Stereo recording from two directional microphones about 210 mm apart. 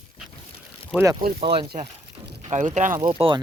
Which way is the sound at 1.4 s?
25° right (ahead or behind).